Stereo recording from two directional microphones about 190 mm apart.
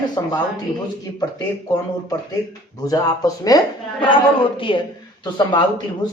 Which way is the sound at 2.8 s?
20° left (ahead or behind).